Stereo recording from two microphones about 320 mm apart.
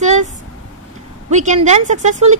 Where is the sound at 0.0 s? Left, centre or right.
Right.